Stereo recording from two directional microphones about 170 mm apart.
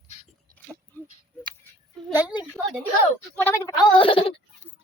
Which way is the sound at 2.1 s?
25° left (ahead or behind).